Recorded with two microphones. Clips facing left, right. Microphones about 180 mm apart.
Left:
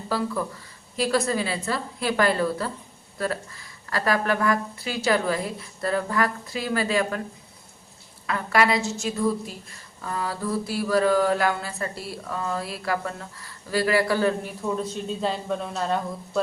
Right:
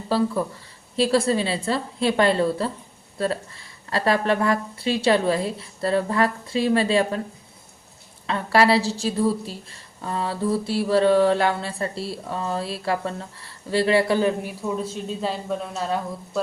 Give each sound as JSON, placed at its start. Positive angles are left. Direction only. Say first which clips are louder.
{"t": 0.1, "sound": "a woman's voice", "louder": "right 5 dB", "side_deg": -30}
{"t": 8.3, "sound": "a woman's voice", "louder": "right 4 dB", "side_deg": -30}
{"t": 14.6, "sound": "a woman's voice", "louder": "left 1 dB", "side_deg": -5}